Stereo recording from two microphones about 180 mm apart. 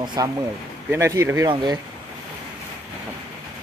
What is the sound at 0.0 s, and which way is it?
Speech, 25° right (ahead or behind).